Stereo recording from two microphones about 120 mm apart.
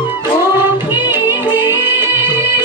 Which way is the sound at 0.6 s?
20° right (ahead or behind).